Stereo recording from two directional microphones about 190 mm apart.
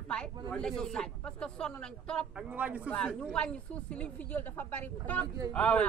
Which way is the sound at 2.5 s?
5° right (ahead or behind).